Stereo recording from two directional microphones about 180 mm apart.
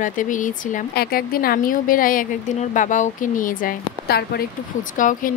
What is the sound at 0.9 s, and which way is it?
Speech, 60° left (ahead or behind).